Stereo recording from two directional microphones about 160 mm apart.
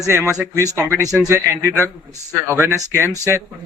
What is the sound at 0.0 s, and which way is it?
A man's voice, 15° right (ahead or behind).